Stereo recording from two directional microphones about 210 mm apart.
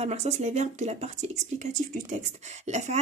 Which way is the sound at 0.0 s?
30° right (ahead or behind).